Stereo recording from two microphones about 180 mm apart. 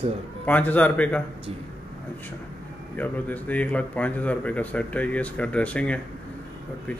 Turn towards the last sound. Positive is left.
turn(degrees=10)  # may be behind; listen again after turning